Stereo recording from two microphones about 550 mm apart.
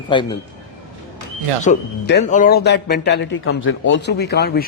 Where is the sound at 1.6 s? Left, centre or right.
Centre.